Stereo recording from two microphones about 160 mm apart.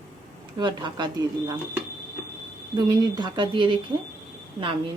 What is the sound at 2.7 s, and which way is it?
A woman's voice, 25° right (ahead or behind).